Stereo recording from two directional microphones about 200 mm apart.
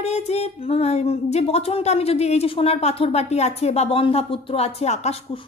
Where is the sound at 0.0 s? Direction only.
35° left (ahead or behind).